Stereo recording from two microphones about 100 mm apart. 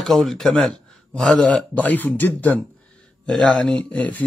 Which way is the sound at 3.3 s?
5° left (ahead or behind).